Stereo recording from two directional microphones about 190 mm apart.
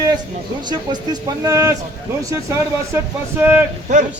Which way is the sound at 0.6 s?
20° right (ahead or behind).